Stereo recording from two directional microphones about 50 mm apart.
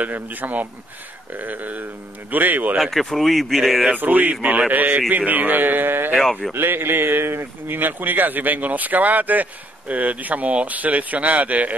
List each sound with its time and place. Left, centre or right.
0.0 s a man's voice: right
2.8 s speech: centre
3.9 s a man's voice: right
6.1 s speech: centre
6.5 s a man's voice: right